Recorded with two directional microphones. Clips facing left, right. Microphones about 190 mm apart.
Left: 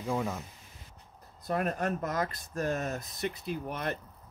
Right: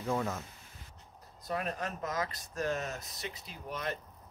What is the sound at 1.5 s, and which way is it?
Speech, 50° left (ahead or behind).